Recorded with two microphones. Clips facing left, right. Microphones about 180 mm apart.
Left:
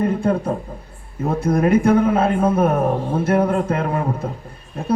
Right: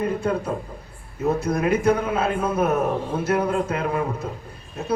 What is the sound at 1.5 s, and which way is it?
A man's voice, 50° left (ahead or behind).